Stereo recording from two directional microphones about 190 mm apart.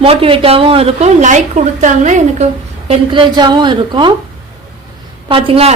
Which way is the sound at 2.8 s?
25° right (ahead or behind).